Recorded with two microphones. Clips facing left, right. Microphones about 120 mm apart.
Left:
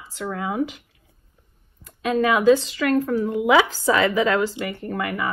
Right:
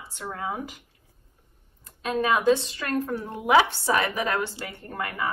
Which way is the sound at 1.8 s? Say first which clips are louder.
Left 4 dB; 90° left.